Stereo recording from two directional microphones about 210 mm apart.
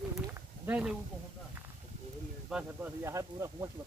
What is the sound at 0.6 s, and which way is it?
Speech, 5° right (ahead or behind).